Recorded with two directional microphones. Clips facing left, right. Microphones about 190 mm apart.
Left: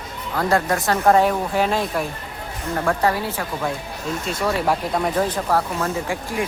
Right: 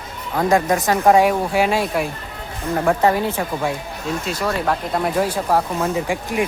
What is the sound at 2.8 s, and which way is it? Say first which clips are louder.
Speech: right 4 dB; 20° right (ahead or behind).